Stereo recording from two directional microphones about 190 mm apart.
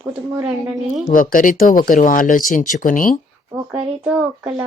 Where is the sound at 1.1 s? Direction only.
45° left (ahead or behind).